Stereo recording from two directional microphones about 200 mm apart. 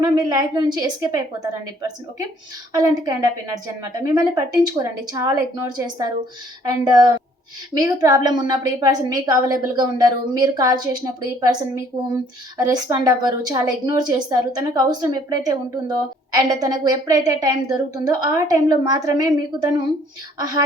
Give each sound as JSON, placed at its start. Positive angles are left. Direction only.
{"t": 0.0, "sound": "a woman's voice", "side_deg": -20}
{"t": 2.7, "sound": "a woman's voice", "side_deg": -20}